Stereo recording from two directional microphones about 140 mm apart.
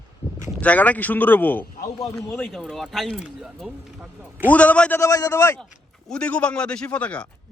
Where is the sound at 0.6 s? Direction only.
10° left (ahead or behind).